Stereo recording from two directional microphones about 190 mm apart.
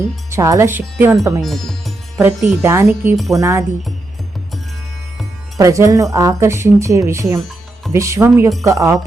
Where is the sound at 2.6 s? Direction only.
15° right (ahead or behind).